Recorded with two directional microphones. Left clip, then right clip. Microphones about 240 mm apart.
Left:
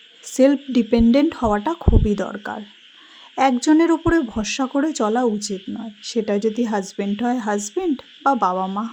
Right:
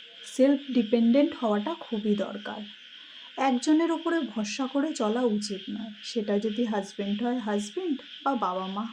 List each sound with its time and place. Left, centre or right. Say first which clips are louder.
0.3 s speech: left 7 dB; left